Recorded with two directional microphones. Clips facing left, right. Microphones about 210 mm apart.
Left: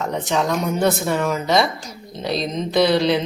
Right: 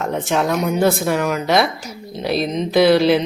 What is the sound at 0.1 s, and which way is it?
Speech, 5° right (ahead or behind).